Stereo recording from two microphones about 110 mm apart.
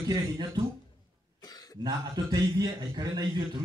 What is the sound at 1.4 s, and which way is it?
Cough, 35° left (ahead or behind).